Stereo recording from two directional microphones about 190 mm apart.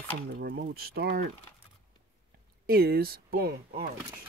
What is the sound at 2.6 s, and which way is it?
Speech, 55° right (ahead or behind).